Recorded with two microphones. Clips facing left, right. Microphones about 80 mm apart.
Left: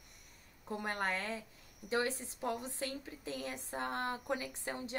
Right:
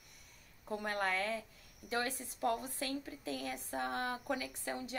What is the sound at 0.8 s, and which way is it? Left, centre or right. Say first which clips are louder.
A woman's voice: right 2 dB; left.